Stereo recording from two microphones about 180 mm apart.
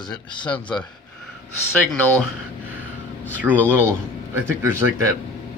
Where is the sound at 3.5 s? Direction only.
10° right (ahead or behind).